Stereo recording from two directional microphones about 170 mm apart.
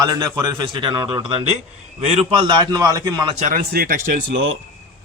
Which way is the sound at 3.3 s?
45° right (ahead or behind).